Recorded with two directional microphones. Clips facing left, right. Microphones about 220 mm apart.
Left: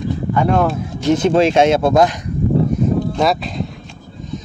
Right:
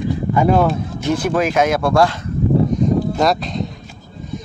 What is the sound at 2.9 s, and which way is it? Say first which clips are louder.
Speech: even; centre (ahead or behind).